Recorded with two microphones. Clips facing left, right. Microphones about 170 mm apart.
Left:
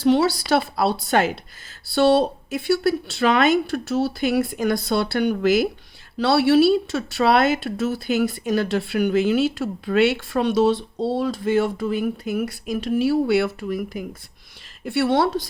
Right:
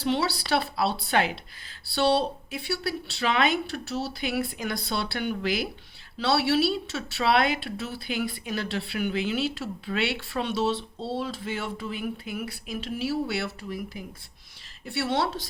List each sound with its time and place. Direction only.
0.0 s speech: 45° left (ahead or behind)
14.8 s speech: 55° left (ahead or behind)